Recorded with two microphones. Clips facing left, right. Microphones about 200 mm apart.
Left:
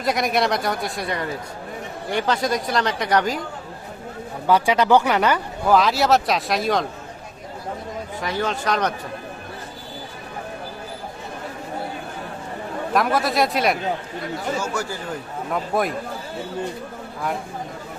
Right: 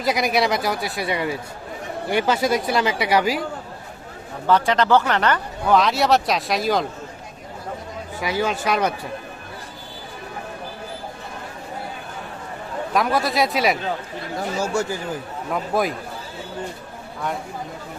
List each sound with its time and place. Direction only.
0.0 s speech: centre (ahead or behind)
4.4 s speech: 10° left (ahead or behind)
8.2 s speech: 10° right (ahead or behind)
12.9 s speech: centre (ahead or behind)
14.6 s speech: 25° right (ahead or behind)
15.5 s speech: centre (ahead or behind)